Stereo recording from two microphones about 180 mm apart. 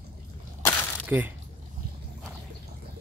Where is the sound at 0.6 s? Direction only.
15° left (ahead or behind).